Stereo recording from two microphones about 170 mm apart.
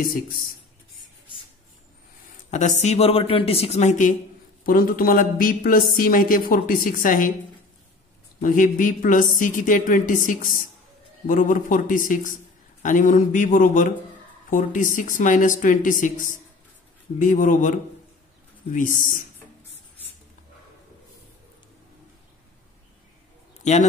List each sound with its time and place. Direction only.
2.5 s speech: 45° left (ahead or behind)
4.6 s a woman's voice: 55° left (ahead or behind)
8.4 s a woman's voice: 50° left (ahead or behind)
23.6 s a man's voice: 40° left (ahead or behind)